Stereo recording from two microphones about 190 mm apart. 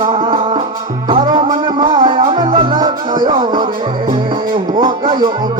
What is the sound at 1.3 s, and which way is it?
Music, 25° right (ahead or behind).